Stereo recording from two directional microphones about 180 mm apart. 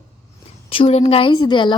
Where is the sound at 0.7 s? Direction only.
30° left (ahead or behind).